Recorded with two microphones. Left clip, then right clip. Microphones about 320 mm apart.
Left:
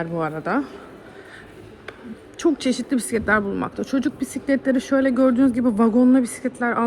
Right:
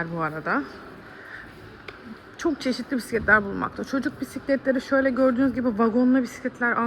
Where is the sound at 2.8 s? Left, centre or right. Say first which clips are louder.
Right 2 dB; left.